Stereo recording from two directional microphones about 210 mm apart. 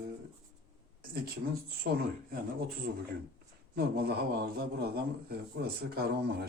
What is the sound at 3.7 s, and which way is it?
Speech, 50° right (ahead or behind).